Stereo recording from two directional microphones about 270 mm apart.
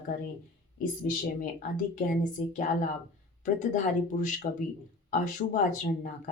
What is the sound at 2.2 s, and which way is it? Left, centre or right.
Speech, left.